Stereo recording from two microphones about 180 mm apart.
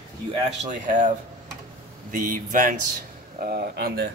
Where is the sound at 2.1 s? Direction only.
45° right (ahead or behind).